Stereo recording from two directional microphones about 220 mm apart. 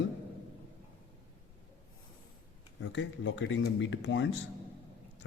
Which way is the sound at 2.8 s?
60° left (ahead or behind).